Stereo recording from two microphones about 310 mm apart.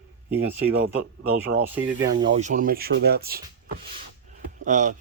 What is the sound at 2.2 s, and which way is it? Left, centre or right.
Speech, right.